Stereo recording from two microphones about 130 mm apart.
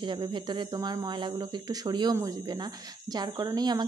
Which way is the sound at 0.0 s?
35° right (ahead or behind).